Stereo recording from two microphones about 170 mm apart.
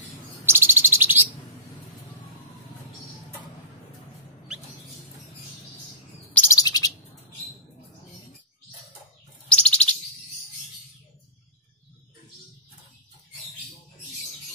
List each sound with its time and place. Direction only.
0.5 s bird: 15° right (ahead or behind)
6.3 s bird: 15° left (ahead or behind)
9.5 s bird: 5° left (ahead or behind)